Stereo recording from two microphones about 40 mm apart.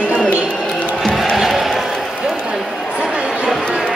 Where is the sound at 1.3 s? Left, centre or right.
Centre.